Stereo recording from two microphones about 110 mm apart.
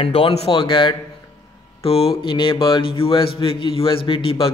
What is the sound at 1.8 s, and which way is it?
Speech, 60° left (ahead or behind).